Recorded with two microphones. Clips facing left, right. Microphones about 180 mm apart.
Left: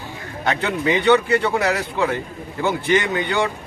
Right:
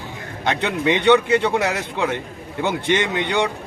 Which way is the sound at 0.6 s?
20° right (ahead or behind).